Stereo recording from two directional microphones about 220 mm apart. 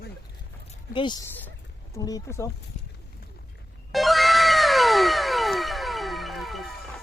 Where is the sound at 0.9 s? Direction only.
20° left (ahead or behind).